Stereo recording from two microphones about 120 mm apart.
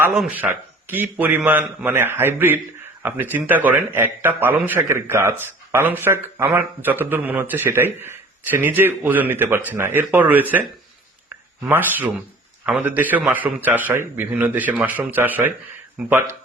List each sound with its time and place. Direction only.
0.3 s a man's voice: 15° right (ahead or behind)
11.3 s a sound: 15° right (ahead or behind)
12.6 s a man's voice: 10° right (ahead or behind)